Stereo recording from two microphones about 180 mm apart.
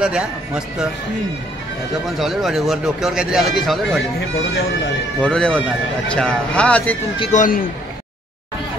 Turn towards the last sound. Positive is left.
turn(degrees=45)  # may be behind; listen again after turning